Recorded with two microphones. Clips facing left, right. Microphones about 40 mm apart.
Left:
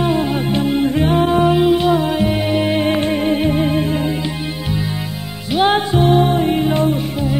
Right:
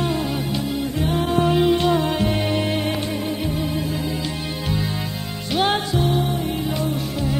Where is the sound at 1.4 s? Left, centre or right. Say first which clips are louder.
Left 4 dB; centre.